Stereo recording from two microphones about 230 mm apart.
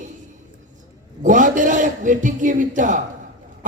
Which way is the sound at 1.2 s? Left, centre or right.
Right.